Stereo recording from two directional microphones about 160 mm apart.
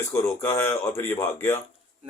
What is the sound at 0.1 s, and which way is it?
Speech, 20° left (ahead or behind).